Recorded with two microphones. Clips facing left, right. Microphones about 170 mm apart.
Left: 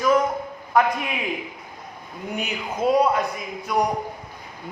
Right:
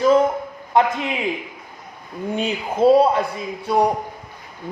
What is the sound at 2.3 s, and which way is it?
A man's voice, 30° right (ahead or behind).